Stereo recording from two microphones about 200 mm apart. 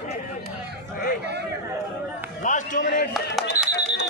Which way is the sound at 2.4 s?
40° left (ahead or behind).